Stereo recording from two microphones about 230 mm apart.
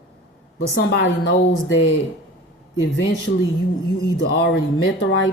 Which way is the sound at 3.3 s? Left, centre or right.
Left.